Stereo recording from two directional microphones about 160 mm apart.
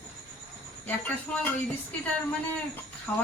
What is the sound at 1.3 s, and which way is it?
Speech, 5° left (ahead or behind).